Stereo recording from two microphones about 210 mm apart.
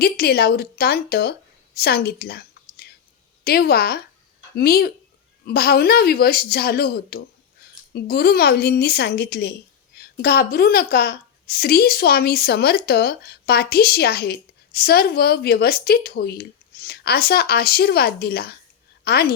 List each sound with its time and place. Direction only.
0.0 s a woman's voice: 45° left (ahead or behind)